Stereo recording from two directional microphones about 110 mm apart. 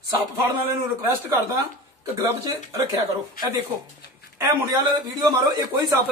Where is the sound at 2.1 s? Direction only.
25° right (ahead or behind).